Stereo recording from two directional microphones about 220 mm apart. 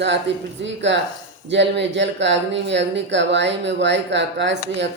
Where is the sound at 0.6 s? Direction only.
55° right (ahead or behind).